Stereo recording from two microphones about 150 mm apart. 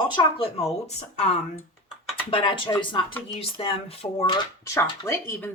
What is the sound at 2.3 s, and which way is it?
Speech, 35° left (ahead or behind).